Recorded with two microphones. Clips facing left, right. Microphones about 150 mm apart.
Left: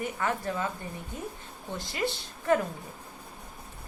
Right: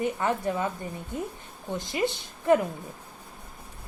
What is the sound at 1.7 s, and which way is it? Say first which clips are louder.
Speech: right 4 dB; 20° right (ahead or behind).